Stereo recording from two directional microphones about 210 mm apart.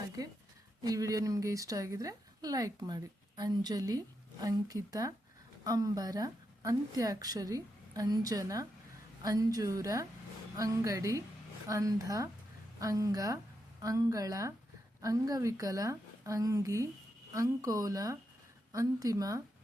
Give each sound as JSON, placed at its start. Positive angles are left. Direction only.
{"t": 0.9, "sound": "a woman's voice", "side_deg": -15}